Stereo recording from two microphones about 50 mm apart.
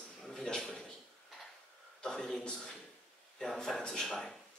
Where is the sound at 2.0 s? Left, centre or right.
Centre.